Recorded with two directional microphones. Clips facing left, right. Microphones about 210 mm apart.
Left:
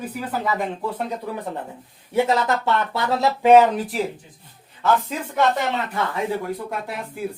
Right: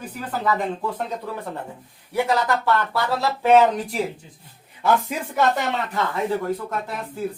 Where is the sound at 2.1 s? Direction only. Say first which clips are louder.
Left 2 dB; 25° left (ahead or behind).